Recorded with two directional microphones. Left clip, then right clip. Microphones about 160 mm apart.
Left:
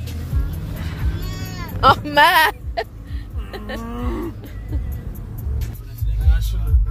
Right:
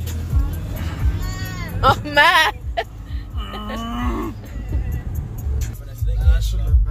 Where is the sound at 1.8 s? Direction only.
15° left (ahead or behind); by 3.6 s 30° left (ahead or behind).